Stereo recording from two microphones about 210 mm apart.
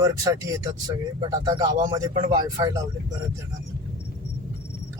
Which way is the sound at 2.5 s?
20° right (ahead or behind).